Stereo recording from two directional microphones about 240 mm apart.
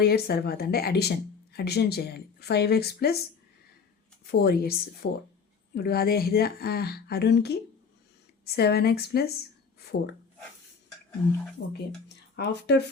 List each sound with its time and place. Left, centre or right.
0.0 s speech: left
4.3 s speech: left
11.6 s speech: left